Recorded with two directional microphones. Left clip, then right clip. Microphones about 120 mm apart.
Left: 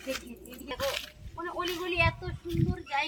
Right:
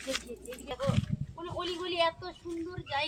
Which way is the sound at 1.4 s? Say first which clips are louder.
Left 4 dB; 40° right (ahead or behind).